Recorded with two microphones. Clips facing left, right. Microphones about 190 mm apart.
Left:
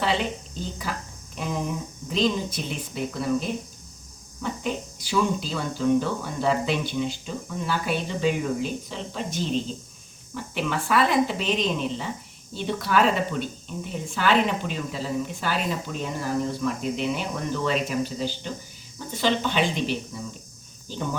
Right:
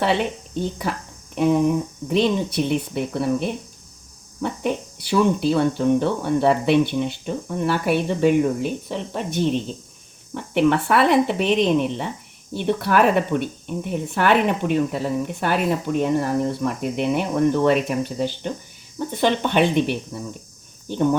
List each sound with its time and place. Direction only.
0.0 s speech: 60° right (ahead or behind)
2.0 s speech: 65° right (ahead or behind)